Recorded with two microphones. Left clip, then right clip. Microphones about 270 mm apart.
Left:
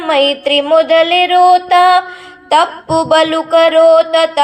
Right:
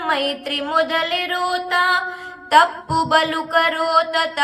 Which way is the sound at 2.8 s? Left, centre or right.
Left.